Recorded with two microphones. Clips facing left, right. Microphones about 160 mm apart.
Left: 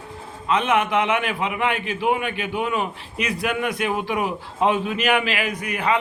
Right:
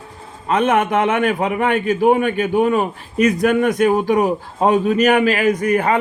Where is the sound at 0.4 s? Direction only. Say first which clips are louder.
Right 4 dB; 45° right (ahead or behind).